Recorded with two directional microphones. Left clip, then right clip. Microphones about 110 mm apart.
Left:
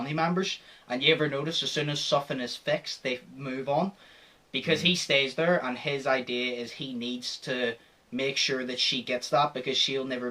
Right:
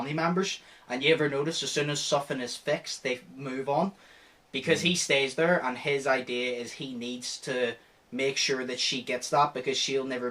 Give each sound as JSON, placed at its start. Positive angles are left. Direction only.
{"t": 0.0, "sound": "speech", "side_deg": 25}